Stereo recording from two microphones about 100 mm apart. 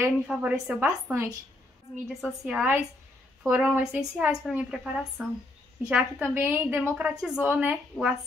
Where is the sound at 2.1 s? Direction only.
5° right (ahead or behind).